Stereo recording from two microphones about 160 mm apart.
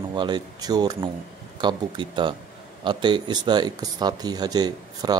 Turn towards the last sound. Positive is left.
turn(degrees=-25)  # may be behind; listen again after turning